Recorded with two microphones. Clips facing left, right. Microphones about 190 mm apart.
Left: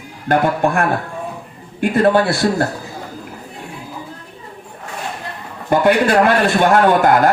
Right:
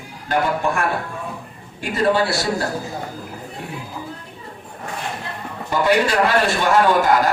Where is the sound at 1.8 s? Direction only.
55° left (ahead or behind).